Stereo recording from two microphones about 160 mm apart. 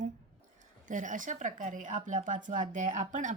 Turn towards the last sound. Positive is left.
turn(degrees=-50)  # may be behind; listen again after turning